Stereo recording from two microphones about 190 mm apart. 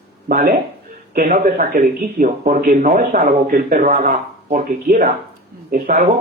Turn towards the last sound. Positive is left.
turn(degrees=-50)  # may be behind; listen again after turning